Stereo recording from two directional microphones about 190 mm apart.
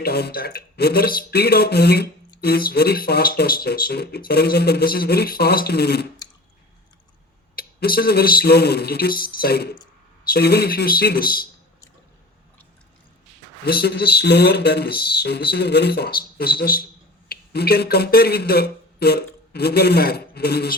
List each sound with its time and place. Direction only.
0.0 s speech: 55° left (ahead or behind)
7.5 s speech: 50° left (ahead or behind)
13.7 s speech: 55° left (ahead or behind)